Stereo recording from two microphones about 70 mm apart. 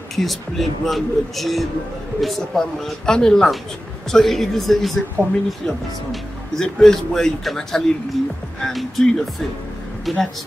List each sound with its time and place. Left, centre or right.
0.1 s speech: centre
6.5 s speech: centre